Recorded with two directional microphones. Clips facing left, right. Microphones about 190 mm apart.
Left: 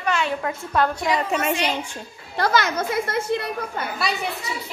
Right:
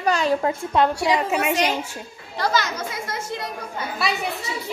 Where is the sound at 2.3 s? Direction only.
55° left (ahead or behind).